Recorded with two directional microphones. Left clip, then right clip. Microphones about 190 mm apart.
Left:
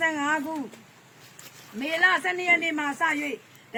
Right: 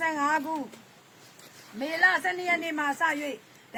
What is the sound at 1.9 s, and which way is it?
Speech, 10° right (ahead or behind).